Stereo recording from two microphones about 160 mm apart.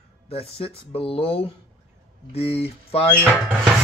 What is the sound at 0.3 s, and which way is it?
Speech, 40° left (ahead or behind).